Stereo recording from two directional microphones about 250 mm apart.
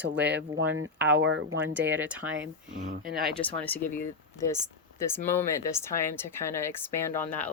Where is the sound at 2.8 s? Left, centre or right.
Right.